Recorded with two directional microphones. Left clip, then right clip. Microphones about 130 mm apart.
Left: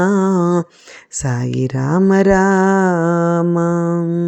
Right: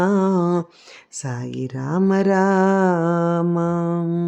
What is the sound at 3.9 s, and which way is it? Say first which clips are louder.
Music: left 5 dB; 10° left (ahead or behind).